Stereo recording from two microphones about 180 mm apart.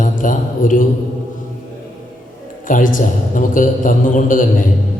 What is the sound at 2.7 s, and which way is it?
A man's voice, 50° left (ahead or behind).